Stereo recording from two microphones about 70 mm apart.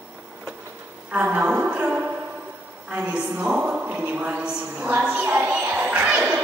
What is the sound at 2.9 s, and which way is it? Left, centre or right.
A woman's voice, centre.